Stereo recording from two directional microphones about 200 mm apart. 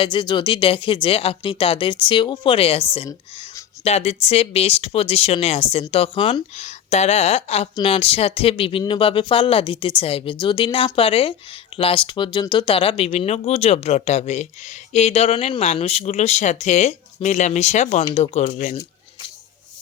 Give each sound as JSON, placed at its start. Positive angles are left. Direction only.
{"t": 0.0, "sound": "speech", "side_deg": 25}